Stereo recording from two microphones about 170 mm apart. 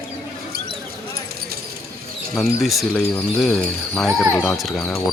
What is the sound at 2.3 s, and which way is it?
Speech, centre (ahead or behind).